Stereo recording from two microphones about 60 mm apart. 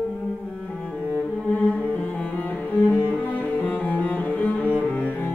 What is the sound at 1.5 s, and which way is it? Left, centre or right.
Cello, left.